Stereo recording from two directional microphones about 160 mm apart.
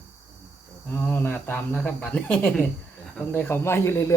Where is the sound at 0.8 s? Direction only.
15° left (ahead or behind).